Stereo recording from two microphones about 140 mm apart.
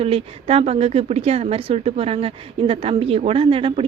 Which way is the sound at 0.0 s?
45° right (ahead or behind).